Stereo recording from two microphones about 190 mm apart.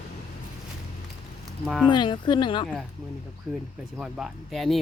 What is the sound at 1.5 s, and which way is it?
Speech, centre (ahead or behind).